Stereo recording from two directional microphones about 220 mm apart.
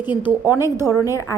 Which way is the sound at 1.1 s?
15° left (ahead or behind).